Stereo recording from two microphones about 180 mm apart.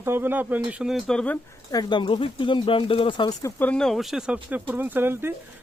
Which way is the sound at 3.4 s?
10° left (ahead or behind).